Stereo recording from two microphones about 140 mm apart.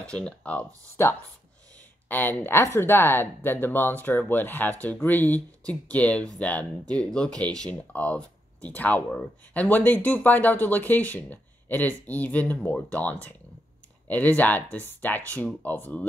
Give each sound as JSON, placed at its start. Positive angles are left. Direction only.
{"t": 0.0, "sound": "speech", "side_deg": 5}
{"t": 2.0, "sound": "speech", "side_deg": 15}